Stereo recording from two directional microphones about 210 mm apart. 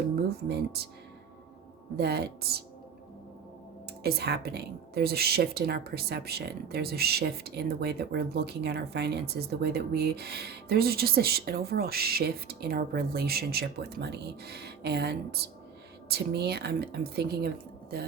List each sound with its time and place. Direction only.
0.3 s a woman's voice: 50° right (ahead or behind)
2.0 s a woman's voice: 50° right (ahead or behind)
4.0 s a woman's voice: 50° right (ahead or behind)